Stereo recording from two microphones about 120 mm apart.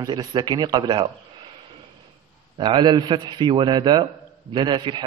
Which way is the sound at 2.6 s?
40° right (ahead or behind).